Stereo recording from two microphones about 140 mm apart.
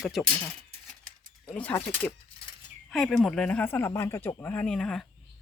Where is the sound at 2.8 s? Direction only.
Centre (ahead or behind).